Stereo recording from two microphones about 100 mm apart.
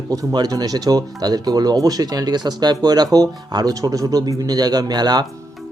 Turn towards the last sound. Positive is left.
turn(degrees=-45)  # may be behind; listen again after turning